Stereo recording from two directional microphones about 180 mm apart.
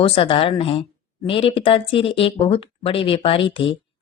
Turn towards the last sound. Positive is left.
turn(degrees=30)  # may be behind; listen again after turning